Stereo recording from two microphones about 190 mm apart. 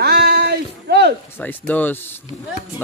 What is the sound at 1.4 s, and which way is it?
Speech, 10° left (ahead or behind).